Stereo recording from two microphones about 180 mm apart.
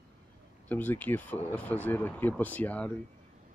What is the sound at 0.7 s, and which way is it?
Speech, 10° left (ahead or behind).